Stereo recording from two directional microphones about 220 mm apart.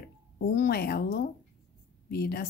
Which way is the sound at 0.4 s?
45° left (ahead or behind).